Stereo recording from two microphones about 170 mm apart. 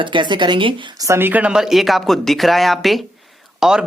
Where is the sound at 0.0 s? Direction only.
30° right (ahead or behind).